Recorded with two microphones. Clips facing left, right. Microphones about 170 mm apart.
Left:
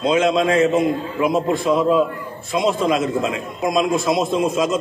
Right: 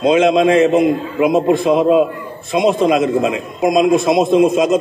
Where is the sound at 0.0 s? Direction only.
20° right (ahead or behind).